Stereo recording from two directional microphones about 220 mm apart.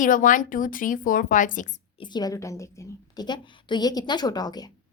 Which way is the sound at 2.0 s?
20° left (ahead or behind).